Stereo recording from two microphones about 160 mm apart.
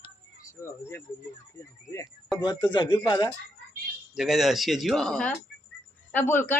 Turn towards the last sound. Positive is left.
turn(degrees=15)  # may be behind; listen again after turning